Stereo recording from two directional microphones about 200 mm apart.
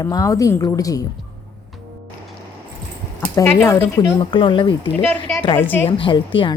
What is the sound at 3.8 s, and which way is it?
Speech, 25° left (ahead or behind).